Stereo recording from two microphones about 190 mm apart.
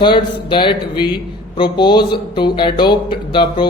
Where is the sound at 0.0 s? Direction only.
25° left (ahead or behind).